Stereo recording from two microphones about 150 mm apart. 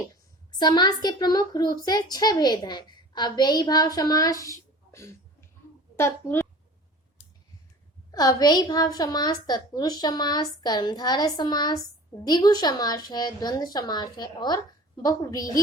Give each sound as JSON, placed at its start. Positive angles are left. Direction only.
{"t": 0.6, "sound": "a child's voice", "side_deg": 30}
{"t": 8.1, "sound": "a child's voice", "side_deg": 25}